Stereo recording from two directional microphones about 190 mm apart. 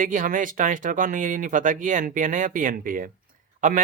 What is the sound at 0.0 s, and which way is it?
Speech, 45° right (ahead or behind).